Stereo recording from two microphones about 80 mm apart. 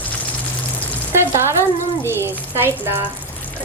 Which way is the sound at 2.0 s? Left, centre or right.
Right.